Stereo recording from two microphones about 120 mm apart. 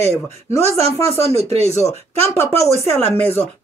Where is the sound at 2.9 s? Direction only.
20° left (ahead or behind).